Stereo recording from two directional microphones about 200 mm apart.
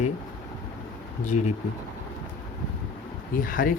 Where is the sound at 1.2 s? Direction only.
35° left (ahead or behind).